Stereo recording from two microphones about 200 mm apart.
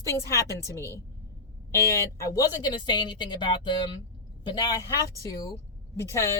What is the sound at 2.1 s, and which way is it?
Speech, 15° left (ahead or behind).